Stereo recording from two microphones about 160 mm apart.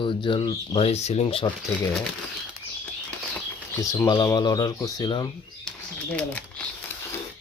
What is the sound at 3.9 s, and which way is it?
Speech, 25° left (ahead or behind).